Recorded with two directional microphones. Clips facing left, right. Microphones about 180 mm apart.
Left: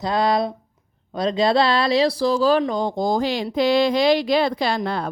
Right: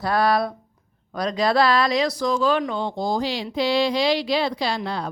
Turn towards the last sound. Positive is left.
turn(degrees=55)  # may be behind; listen again after turning